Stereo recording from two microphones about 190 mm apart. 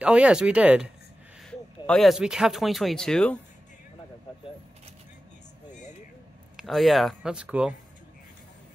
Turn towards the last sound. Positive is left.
turn(degrees=-5)  # may be behind; listen again after turning